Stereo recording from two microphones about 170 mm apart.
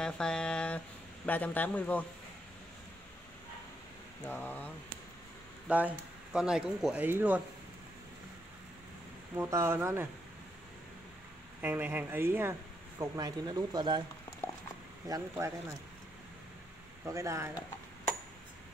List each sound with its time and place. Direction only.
0.0 s speech: 5° left (ahead or behind)
4.3 s a sound: 10° left (ahead or behind)
5.7 s speech: 10° right (ahead or behind)
9.3 s speech: 15° right (ahead or behind)
11.6 s speech: 10° right (ahead or behind)
15.0 s speech: 20° right (ahead or behind)
17.0 s speech: 15° right (ahead or behind)